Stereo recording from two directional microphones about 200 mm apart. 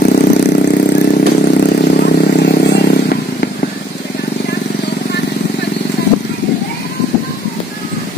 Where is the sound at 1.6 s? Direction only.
45° left (ahead or behind).